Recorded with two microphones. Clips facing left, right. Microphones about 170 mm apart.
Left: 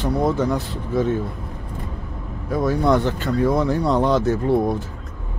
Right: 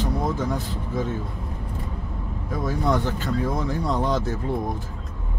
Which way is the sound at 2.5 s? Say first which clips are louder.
Left 6 dB; 70° left (ahead or behind).